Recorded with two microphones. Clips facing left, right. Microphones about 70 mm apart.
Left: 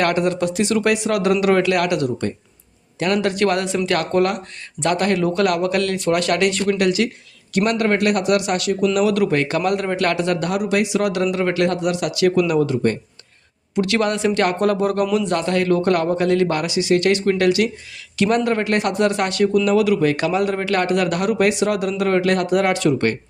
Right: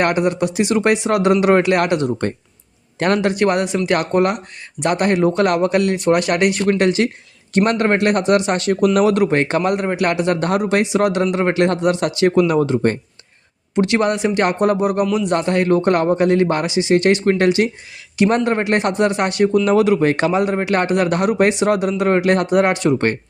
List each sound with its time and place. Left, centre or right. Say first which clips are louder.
0.0 s a man's voice: right 2 dB; right
3.2 s a man's voice: even; right
6.7 s speech: right 2 dB; right
8.7 s speech: right 3 dB; right
9.1 s a man's voice: right 2 dB; right
10.4 s a man's voice: right 3 dB; right; by 15.4 s centre
15.4 s a man's voice: right 2 dB; right